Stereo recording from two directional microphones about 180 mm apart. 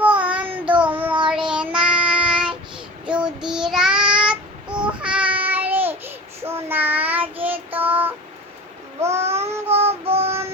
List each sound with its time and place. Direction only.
0.0 s child singing: 5° right (ahead or behind)
9.7 s synthetic singing: 35° right (ahead or behind)